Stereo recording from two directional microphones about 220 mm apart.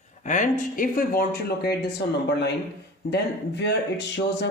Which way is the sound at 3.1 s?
50° left (ahead or behind).